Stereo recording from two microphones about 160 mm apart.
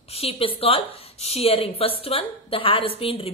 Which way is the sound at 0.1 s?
35° left (ahead or behind).